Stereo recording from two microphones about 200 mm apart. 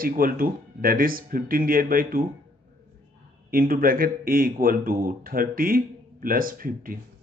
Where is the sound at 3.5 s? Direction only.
45° right (ahead or behind).